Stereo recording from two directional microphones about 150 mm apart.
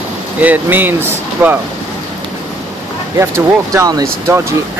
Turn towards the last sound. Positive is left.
turn(degrees=-20)  # may be behind; listen again after turning